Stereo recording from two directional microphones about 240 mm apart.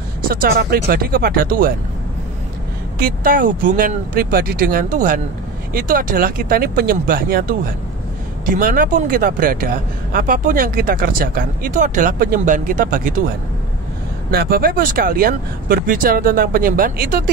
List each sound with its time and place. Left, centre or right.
0.3 s speech: right
3.0 s speech: right
14.3 s speech: right